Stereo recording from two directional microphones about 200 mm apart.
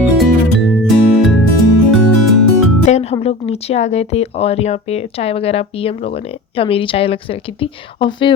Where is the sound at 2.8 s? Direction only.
30° left (ahead or behind).